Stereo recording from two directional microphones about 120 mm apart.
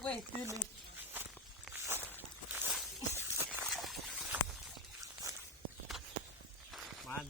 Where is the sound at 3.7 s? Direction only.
Centre (ahead or behind).